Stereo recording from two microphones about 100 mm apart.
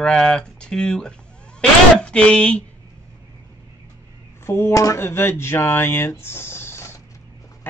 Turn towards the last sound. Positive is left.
turn(degrees=25)  # may be behind; listen again after turning